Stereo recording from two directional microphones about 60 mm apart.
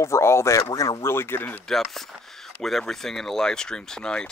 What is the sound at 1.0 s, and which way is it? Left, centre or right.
Speech, left.